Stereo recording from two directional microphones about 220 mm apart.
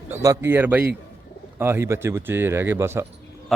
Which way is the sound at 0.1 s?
10° right (ahead or behind).